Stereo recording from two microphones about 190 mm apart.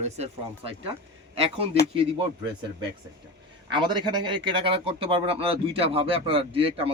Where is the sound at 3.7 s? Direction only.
25° right (ahead or behind).